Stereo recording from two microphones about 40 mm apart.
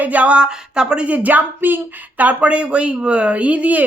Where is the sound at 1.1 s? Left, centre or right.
Right.